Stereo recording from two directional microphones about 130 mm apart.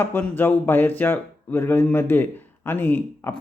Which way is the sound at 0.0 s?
15° left (ahead or behind).